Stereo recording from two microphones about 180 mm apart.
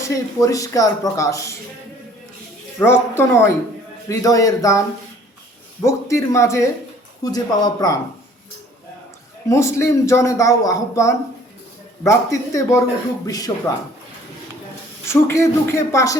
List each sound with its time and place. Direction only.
0.0 s speech: 15° left (ahead or behind)
2.7 s speech: 15° left (ahead or behind)
5.8 s speech: 15° left (ahead or behind)
9.5 s speech: 15° left (ahead or behind)
15.0 s speech: 15° left (ahead or behind)